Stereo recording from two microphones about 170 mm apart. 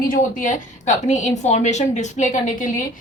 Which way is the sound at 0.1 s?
50° left (ahead or behind).